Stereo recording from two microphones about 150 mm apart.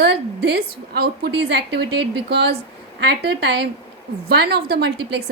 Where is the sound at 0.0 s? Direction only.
90° right.